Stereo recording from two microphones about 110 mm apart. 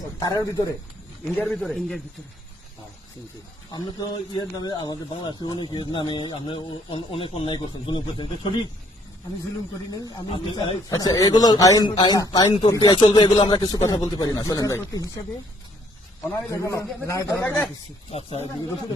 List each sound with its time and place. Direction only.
0.2 s a man's voice: 40° left (ahead or behind)
1.5 s a man's voice: 5° left (ahead or behind)
3.7 s speech: 40° left (ahead or behind)
9.9 s a man's voice: 35° left (ahead or behind)
10.3 s speech: 50° left (ahead or behind)
10.8 s a man's voice: 35° left (ahead or behind)
12.8 s a man's voice: 45° left (ahead or behind)
16.5 s a man's voice: 25° left (ahead or behind)
18.1 s speech: 65° left (ahead or behind)